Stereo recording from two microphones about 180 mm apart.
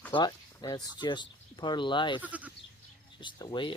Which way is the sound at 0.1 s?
25° left (ahead or behind).